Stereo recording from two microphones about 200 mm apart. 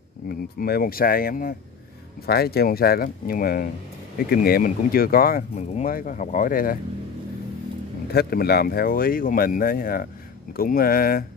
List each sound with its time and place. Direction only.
0.3 s speech: 50° left (ahead or behind)
8.1 s speech: 50° left (ahead or behind)